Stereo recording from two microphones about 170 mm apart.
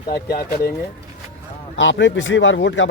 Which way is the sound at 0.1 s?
65° left (ahead or behind).